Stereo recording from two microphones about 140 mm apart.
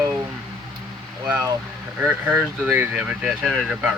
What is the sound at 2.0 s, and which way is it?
Speech, 10° right (ahead or behind).